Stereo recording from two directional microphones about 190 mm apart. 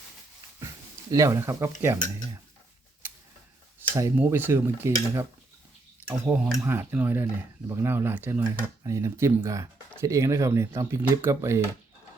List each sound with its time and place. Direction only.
1.1 s speech: 15° right (ahead or behind)
3.0 s mechanisms: 10° right (ahead or behind)
3.9 s speech: 10° right (ahead or behind)